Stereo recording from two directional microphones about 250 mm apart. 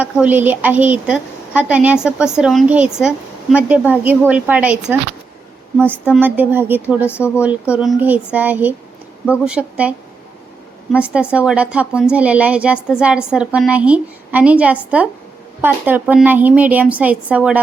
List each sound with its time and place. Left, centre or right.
0.0 s a woman's voice: centre
5.9 s a woman's voice: centre
10.9 s a woman's voice: centre